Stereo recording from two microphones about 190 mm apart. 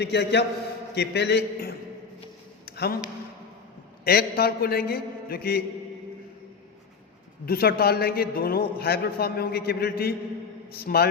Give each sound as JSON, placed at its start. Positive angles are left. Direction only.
{"t": 0.0, "sound": "a man's voice", "side_deg": 60}
{"t": 2.6, "sound": "a sound", "side_deg": 55}
{"t": 4.0, "sound": "a man's voice", "side_deg": 55}
{"t": 7.4, "sound": "a man's voice", "side_deg": 50}